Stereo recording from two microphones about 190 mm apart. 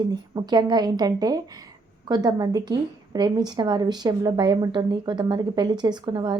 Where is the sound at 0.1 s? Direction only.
20° right (ahead or behind).